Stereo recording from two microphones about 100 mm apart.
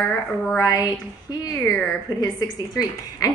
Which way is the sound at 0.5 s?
35° left (ahead or behind).